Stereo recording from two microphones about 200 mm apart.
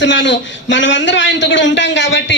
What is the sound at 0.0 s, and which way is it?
A man's voice, 65° left (ahead or behind).